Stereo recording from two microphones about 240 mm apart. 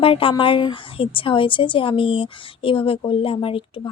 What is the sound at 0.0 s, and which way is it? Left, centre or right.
A woman's voice, left.